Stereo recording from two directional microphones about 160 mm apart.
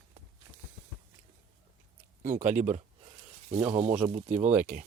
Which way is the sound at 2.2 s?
55° right (ahead or behind).